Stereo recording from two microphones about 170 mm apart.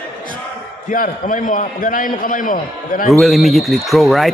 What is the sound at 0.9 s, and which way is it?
A man's voice, 50° left (ahead or behind).